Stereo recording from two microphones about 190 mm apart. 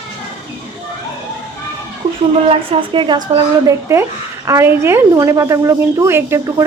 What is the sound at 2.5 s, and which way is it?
A woman's voice, 25° right (ahead or behind).